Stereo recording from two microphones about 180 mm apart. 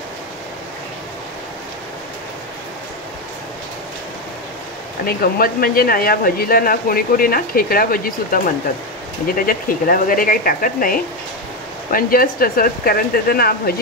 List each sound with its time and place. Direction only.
5.0 s speech: 55° left (ahead or behind)
9.5 s speech: 50° left (ahead or behind)